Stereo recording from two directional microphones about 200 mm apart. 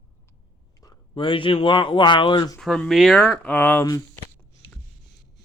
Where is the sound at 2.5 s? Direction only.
Centre (ahead or behind).